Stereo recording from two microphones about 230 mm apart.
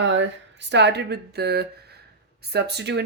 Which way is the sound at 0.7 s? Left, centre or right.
Right.